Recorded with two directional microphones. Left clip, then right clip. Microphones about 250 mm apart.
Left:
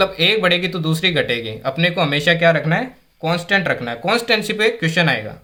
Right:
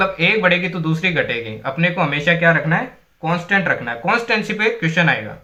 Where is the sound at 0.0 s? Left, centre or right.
Left.